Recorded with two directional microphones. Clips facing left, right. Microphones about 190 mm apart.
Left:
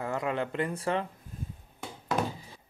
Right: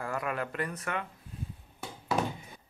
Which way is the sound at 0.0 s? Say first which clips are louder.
Left 3 dB; 25° left (ahead or behind).